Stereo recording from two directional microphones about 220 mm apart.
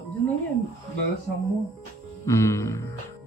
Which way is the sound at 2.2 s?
15° left (ahead or behind).